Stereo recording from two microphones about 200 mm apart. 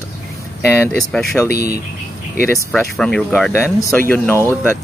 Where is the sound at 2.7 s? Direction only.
5° left (ahead or behind).